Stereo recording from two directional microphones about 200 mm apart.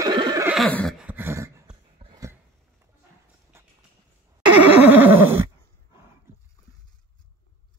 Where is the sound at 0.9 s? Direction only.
10° right (ahead or behind).